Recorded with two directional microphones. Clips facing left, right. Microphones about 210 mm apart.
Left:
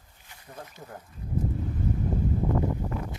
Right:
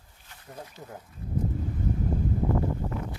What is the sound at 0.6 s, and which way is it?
Speech, 5° right (ahead or behind).